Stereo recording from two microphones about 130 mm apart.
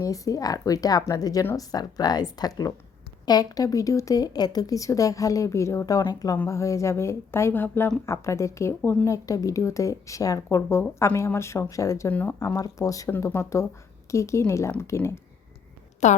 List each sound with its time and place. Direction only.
0.0 s a woman's voice: 25° left (ahead or behind)
12.4 s speech: 25° left (ahead or behind)
16.0 s a woman's voice: 65° left (ahead or behind)